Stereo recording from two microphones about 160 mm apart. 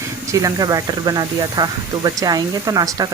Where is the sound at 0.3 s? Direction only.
20° right (ahead or behind).